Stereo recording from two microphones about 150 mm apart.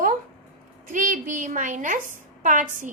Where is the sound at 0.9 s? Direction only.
60° right (ahead or behind).